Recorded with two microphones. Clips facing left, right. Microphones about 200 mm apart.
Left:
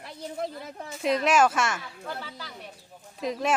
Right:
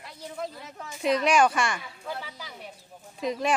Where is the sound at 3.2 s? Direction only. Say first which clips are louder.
Right 1 dB; centre (ahead or behind).